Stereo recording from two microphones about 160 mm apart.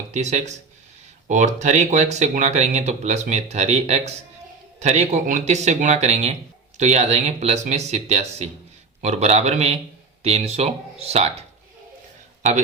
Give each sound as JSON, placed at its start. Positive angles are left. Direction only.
{"t": 0.1, "sound": "a man's voice", "side_deg": -45}